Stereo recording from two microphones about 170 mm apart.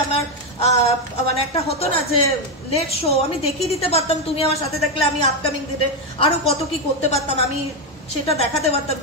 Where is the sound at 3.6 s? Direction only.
35° left (ahead or behind).